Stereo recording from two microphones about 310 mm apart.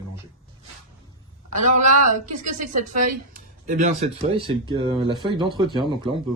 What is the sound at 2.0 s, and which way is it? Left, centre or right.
Speech, right.